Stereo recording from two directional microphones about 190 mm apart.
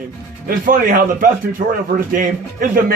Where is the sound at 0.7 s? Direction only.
45° right (ahead or behind).